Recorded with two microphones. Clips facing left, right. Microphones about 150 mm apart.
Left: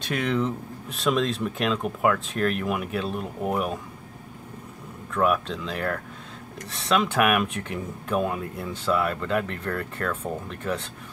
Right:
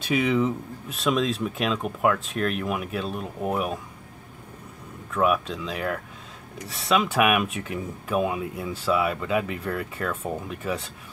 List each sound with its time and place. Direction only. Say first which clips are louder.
0.0 s speech: right 3 dB; 5° right (ahead or behind)
5.1 s speech: even; 5° right (ahead or behind)